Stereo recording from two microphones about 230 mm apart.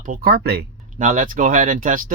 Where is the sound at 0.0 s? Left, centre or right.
Right.